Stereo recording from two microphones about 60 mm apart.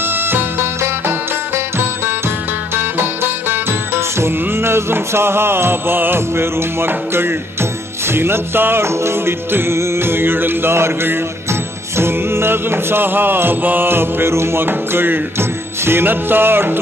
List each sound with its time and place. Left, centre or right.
0.1 s music: right
2.7 s music: right